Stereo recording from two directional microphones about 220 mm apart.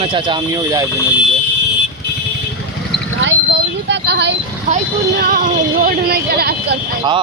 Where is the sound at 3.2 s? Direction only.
55° right (ahead or behind).